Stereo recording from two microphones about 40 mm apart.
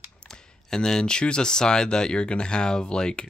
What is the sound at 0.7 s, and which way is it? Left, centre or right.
Speech, centre.